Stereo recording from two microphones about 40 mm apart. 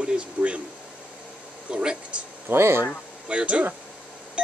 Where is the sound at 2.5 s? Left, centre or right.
Right.